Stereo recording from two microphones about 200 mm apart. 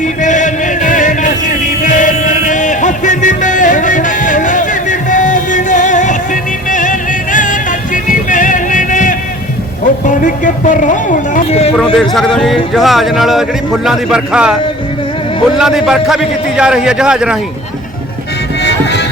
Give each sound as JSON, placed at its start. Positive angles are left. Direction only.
{"t": 0.2, "sound": "music", "side_deg": 40}
{"t": 8.3, "sound": "music", "side_deg": 40}
{"t": 10.1, "sound": "a sound", "side_deg": 40}
{"t": 11.9, "sound": "a man's voice", "side_deg": 0}
{"t": 18.6, "sound": "music", "side_deg": 60}